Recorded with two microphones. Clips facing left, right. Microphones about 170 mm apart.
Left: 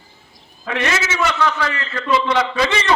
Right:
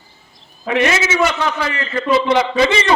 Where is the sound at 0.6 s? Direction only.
15° right (ahead or behind).